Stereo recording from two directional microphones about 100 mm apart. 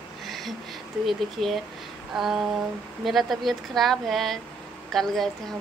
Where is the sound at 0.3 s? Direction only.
Centre (ahead or behind).